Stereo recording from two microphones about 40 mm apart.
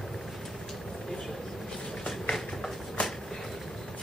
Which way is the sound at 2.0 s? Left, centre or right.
Centre.